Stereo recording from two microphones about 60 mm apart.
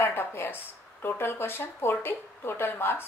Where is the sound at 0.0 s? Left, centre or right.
Left.